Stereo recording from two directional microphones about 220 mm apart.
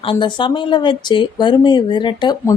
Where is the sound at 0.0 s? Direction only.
25° left (ahead or behind).